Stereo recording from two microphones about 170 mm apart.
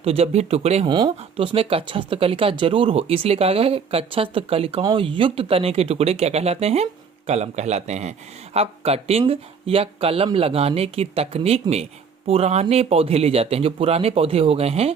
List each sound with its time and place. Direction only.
0.0 s speech: 35° right (ahead or behind)